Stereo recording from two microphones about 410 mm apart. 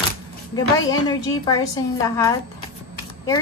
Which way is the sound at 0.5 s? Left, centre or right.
Centre.